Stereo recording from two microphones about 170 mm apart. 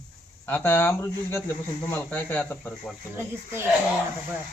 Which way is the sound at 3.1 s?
15° right (ahead or behind).